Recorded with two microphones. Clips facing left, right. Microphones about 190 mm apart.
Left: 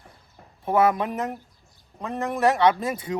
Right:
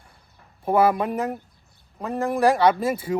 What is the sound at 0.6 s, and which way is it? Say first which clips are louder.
Speech: right 2 dB; 5° right (ahead or behind).